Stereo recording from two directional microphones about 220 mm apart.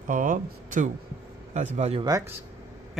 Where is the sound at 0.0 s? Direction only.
40° right (ahead or behind).